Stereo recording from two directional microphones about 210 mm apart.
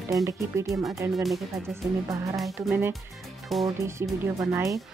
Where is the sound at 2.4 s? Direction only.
Centre (ahead or behind).